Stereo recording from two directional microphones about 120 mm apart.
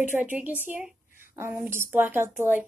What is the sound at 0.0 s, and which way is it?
A woman's voice, 15° right (ahead or behind).